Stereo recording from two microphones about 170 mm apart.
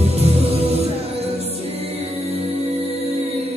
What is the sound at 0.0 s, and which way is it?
Music, 35° right (ahead or behind).